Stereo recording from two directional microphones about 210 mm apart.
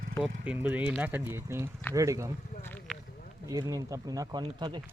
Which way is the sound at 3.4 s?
15° right (ahead or behind).